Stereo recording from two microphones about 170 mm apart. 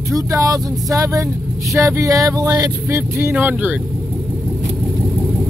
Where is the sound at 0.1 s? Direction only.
20° right (ahead or behind).